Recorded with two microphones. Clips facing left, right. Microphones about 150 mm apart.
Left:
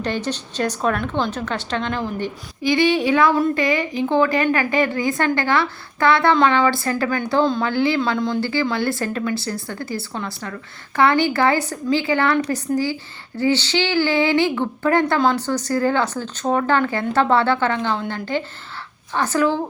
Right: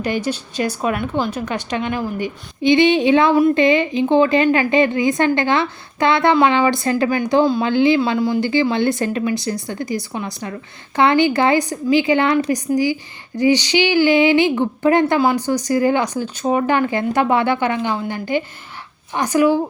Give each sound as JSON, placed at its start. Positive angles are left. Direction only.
{"t": 0.0, "sound": "speech", "side_deg": -10}
{"t": 2.6, "sound": "a woman's voice", "side_deg": -20}